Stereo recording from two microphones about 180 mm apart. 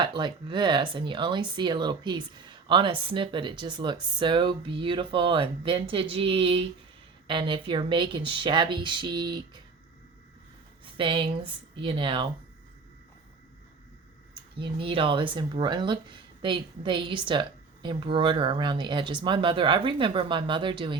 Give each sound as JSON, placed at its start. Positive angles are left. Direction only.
{"t": 0.0, "sound": "speech", "side_deg": -25}
{"t": 10.9, "sound": "speech", "side_deg": -30}
{"t": 14.6, "sound": "speech", "side_deg": -30}